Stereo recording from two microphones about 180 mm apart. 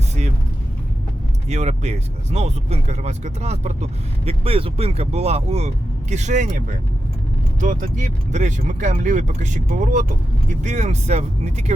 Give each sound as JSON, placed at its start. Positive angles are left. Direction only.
{"t": 1.5, "sound": "speech", "side_deg": -40}
{"t": 7.6, "sound": "speech", "side_deg": -45}